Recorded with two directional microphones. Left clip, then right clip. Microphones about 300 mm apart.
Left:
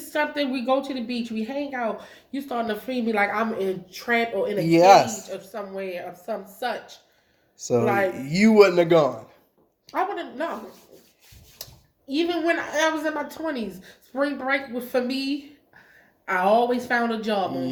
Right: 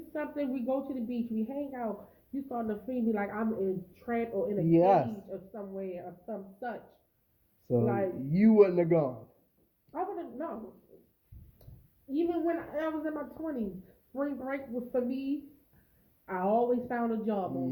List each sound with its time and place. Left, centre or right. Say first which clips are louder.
0.1 s speech: left 10 dB; centre
8.6 s speech: left 9 dB; left
9.9 s speech: left 10 dB; centre
12.1 s speech: left 8 dB; centre